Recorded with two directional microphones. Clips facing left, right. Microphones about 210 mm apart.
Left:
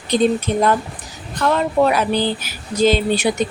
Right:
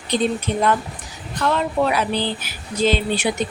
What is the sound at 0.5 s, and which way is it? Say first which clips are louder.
Speech: left 3 dB; 45° left (ahead or behind).